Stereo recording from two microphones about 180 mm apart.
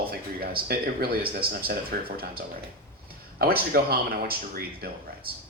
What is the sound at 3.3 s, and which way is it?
Speech, 60° right (ahead or behind).